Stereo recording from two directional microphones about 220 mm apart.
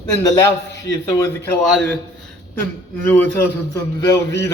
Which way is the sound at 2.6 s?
5° left (ahead or behind).